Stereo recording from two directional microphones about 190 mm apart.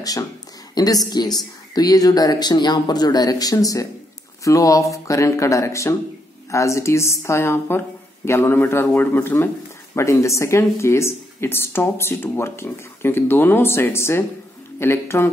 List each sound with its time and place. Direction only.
0.7 s speech: 20° left (ahead or behind)